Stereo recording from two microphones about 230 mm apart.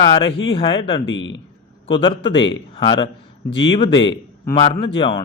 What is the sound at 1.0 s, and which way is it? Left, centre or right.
Speech, left.